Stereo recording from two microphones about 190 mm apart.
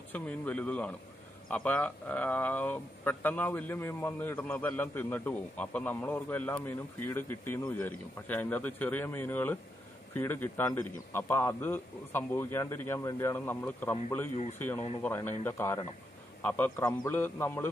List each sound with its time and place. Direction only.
0.1 s speech: 5° left (ahead or behind)
15.0 s speech: 10° left (ahead or behind)